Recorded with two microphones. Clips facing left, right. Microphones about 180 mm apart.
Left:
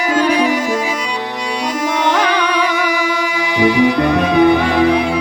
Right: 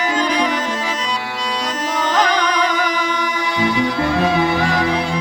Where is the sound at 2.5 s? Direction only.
10° left (ahead or behind).